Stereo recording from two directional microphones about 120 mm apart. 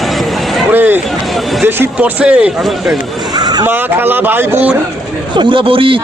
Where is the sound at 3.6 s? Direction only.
15° right (ahead or behind).